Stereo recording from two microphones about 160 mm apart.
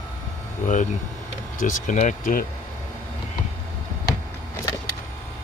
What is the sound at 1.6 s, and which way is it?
Speech, 50° left (ahead or behind).